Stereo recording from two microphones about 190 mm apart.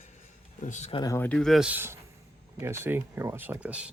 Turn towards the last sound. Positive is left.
turn(degrees=-5)  # may be behind; listen again after turning